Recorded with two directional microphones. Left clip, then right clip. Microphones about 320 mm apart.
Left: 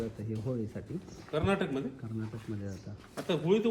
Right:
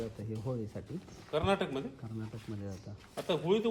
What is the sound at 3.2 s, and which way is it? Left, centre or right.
Speech, right.